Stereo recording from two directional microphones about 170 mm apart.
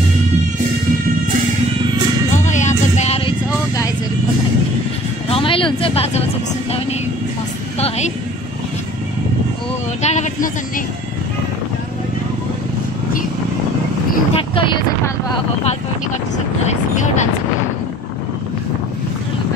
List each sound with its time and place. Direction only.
2.3 s music: 45° left (ahead or behind)
5.3 s a sound: 30° left (ahead or behind)
10.0 s speech: 45° left (ahead or behind)
14.3 s speech: 30° left (ahead or behind)
16.6 s speech: 45° left (ahead or behind)